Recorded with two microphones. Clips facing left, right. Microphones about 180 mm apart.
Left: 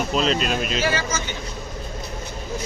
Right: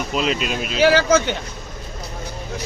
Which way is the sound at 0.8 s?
65° right (ahead or behind).